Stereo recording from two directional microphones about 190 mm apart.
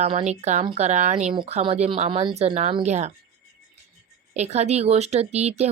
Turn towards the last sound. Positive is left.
turn(degrees=-35)  # may be behind; listen again after turning